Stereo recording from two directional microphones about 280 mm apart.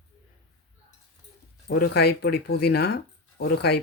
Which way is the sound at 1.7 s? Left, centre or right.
Left.